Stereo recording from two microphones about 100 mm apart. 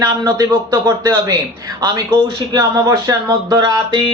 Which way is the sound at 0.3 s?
40° right (ahead or behind).